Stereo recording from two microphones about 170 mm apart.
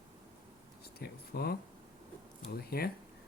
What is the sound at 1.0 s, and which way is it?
Speech, 65° left (ahead or behind).